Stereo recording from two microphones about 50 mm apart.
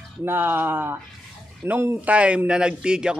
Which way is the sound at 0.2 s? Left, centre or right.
Right.